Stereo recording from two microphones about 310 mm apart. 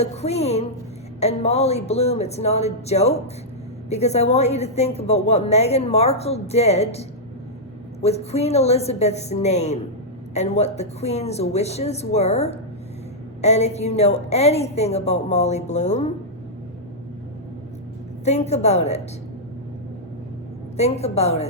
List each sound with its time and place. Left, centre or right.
0.0 s a woman's voice: left
8.0 s a woman's voice: centre
18.3 s a woman's voice: left
20.7 s a woman's voice: left